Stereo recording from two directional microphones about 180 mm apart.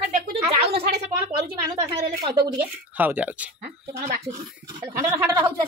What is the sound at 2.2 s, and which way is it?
Speech, 30° right (ahead or behind).